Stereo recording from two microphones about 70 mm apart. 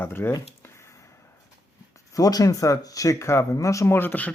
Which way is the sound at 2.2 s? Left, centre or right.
Left.